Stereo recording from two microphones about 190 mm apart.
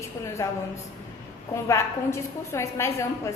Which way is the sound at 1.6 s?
15° left (ahead or behind).